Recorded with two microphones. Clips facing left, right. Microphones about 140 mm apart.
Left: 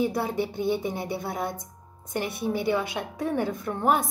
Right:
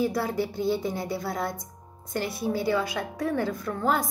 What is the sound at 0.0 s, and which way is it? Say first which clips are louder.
A woman's voice: even; 20° left (ahead or behind).